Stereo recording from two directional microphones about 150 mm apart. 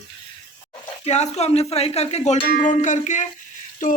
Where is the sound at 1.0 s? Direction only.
45° left (ahead or behind).